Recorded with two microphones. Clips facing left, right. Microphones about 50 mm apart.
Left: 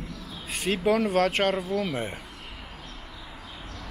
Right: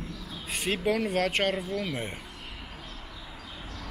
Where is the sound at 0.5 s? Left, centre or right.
Centre.